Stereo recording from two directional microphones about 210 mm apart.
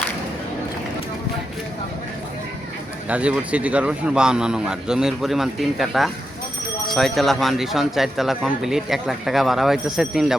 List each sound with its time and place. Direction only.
3.1 s speech: 5° right (ahead or behind)